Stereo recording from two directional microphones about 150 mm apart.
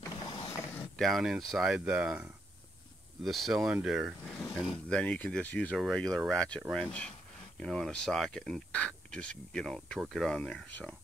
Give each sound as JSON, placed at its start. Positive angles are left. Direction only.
{"t": 0.0, "sound": "mechanisms", "side_deg": 30}
{"t": 0.7, "sound": "speech", "side_deg": 0}
{"t": 3.3, "sound": "speech", "side_deg": 0}